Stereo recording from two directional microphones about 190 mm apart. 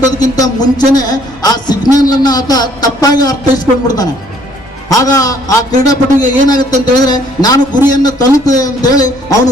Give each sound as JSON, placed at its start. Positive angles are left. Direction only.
{"t": 0.3, "sound": "a man's voice", "side_deg": 20}